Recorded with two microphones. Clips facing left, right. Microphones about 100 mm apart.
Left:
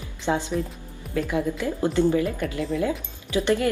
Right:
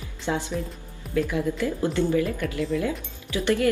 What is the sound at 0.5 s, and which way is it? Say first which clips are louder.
Speech: left 3 dB; 40° left (ahead or behind).